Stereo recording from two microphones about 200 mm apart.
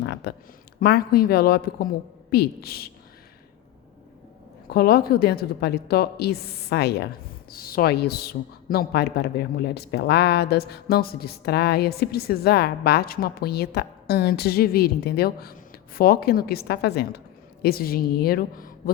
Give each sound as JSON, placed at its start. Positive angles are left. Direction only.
{"t": 0.0, "sound": "speech", "side_deg": 65}
{"t": 0.8, "sound": "speech", "side_deg": 50}
{"t": 4.7, "sound": "speech", "side_deg": 50}